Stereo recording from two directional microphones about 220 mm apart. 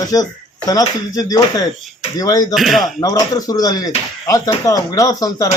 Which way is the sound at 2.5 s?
Centre (ahead or behind).